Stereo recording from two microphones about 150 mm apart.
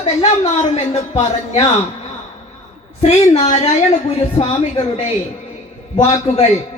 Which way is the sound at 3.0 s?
50° left (ahead or behind).